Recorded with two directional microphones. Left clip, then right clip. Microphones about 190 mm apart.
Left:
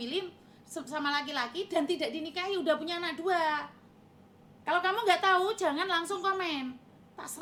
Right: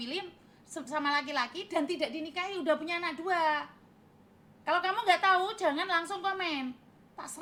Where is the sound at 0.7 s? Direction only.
15° right (ahead or behind).